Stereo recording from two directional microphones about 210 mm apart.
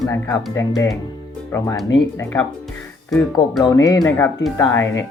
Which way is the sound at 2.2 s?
10° left (ahead or behind).